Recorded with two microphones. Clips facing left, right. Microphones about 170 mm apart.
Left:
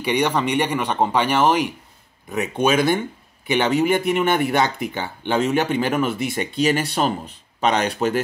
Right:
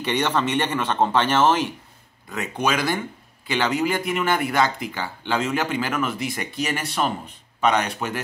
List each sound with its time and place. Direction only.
0.0 s speech: 10° left (ahead or behind); by 8.1 s 35° left (ahead or behind)